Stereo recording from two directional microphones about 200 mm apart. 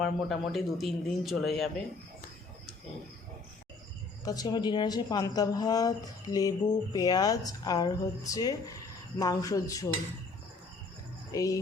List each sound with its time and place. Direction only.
0.0 s speech: centre (ahead or behind)
4.2 s a woman's voice: 20° left (ahead or behind)
9.1 s music: 20° left (ahead or behind)
11.3 s music: 15° left (ahead or behind)